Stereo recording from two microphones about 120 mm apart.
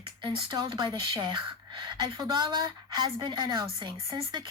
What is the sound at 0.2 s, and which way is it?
Speech, 40° right (ahead or behind).